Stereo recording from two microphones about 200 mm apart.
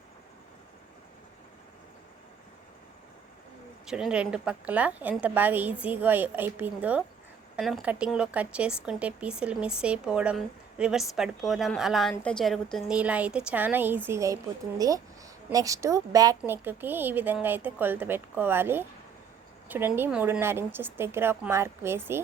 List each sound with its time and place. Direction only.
3.8 s a woman's voice: 5° right (ahead or behind)